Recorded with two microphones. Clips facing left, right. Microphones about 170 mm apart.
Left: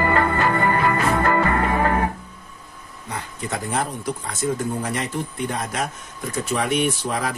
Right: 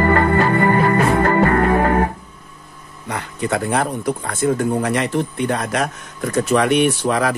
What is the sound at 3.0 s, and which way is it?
Speech, 70° right (ahead or behind).